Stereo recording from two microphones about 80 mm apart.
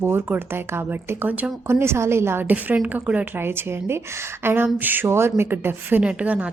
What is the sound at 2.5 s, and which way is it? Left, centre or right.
A woman's voice, centre.